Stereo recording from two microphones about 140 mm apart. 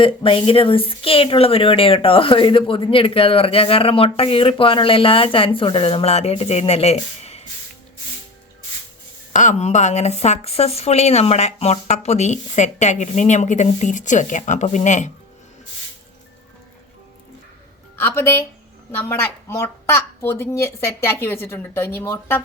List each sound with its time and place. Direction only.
0.0 s speech: 40° left (ahead or behind)
9.3 s speech: 60° left (ahead or behind)
17.9 s a woman's voice: 15° left (ahead or behind)